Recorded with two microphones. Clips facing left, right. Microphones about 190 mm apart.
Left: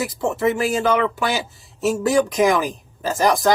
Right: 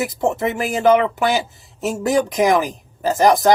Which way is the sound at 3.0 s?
20° right (ahead or behind).